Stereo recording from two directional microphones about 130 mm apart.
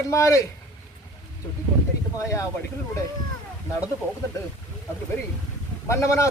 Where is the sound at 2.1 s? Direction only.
25° left (ahead or behind).